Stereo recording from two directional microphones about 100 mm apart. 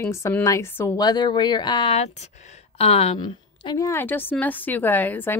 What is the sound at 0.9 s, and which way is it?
Speech, 40° left (ahead or behind).